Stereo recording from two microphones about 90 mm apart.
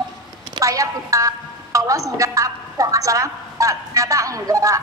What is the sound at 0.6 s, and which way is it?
A woman's voice, 40° right (ahead or behind).